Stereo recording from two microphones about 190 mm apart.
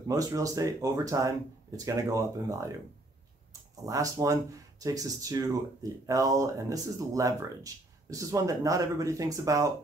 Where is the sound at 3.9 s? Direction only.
15° right (ahead or behind).